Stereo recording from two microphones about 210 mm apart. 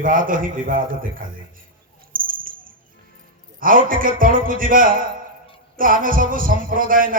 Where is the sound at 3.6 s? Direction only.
40° right (ahead or behind).